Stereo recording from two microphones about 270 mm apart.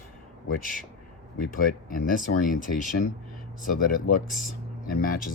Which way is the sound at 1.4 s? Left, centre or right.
Left.